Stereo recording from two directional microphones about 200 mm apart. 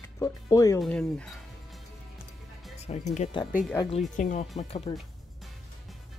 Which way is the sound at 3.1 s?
30° left (ahead or behind).